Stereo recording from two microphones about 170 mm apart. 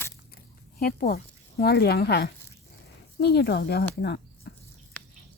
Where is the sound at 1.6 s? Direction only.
70° left (ahead or behind).